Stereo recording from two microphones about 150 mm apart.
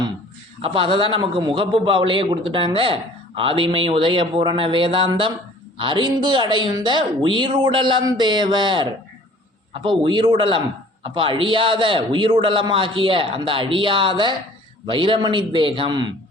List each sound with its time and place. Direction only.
0.6 s a man's voice: 35° right (ahead or behind)
10.0 s a man's voice: 30° right (ahead or behind)